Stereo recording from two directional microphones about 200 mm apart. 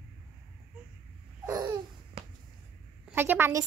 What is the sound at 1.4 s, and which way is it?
Babbling, 15° right (ahead or behind).